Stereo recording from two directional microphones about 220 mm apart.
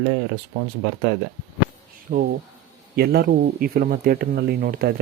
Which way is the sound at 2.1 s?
35° right (ahead or behind).